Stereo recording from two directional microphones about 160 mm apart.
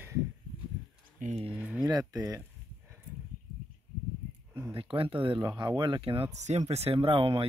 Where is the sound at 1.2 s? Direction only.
40° right (ahead or behind).